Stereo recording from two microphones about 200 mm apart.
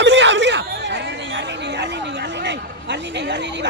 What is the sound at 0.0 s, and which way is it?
Chatter, 60° right (ahead or behind).